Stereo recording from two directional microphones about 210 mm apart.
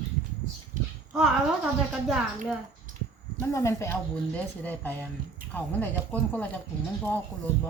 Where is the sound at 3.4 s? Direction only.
15° left (ahead or behind).